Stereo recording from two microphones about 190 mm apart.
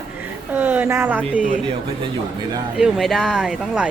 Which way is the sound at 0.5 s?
10° right (ahead or behind).